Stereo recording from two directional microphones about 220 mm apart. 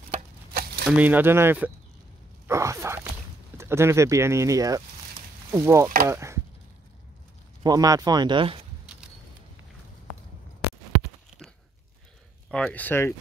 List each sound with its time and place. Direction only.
0.5 s crumpling: 45° right (ahead or behind)
0.8 s speech: 5° right (ahead or behind)
6.0 s chop: 10° right (ahead or behind)
7.6 s speech: 15° right (ahead or behind)
8.9 s a sound: 5° right (ahead or behind)
12.4 s speech: 5° left (ahead or behind)